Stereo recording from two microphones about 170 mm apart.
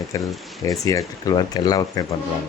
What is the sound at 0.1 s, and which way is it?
Speech, 20° left (ahead or behind).